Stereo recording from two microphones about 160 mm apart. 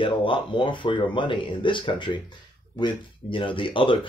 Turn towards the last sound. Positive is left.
turn(degrees=30)  # may be behind; listen again after turning